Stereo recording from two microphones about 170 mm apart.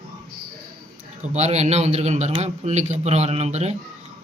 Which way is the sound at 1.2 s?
40° right (ahead or behind).